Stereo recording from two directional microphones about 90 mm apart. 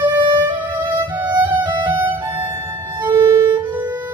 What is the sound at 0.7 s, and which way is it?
Music, 60° right (ahead or behind).